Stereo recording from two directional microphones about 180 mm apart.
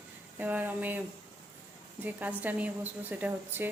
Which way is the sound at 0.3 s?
10° right (ahead or behind).